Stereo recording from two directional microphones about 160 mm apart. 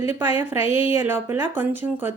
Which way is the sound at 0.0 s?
15° right (ahead or behind).